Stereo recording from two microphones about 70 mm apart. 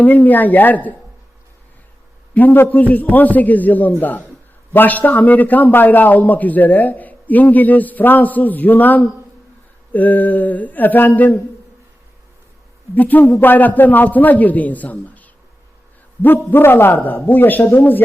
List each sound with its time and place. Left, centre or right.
0.0 s a man's voice: left
2.3 s a man's voice: left
12.9 s a man's voice: left